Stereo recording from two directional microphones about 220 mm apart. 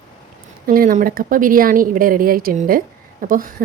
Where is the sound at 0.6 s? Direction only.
40° right (ahead or behind).